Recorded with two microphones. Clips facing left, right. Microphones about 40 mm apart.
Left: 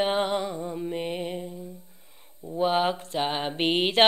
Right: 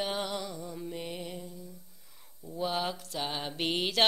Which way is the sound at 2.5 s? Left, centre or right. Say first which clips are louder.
Left 9 dB; left.